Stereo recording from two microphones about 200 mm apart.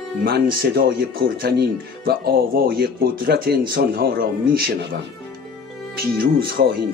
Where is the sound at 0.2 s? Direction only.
50° right (ahead or behind).